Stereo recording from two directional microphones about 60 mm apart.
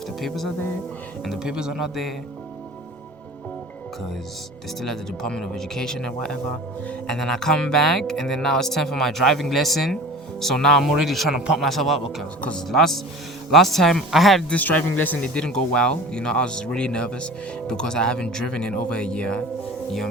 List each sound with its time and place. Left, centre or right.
0.2 s a man's voice: centre
4.8 s a man's voice: centre
14.5 s speech: left
15.2 s speech: centre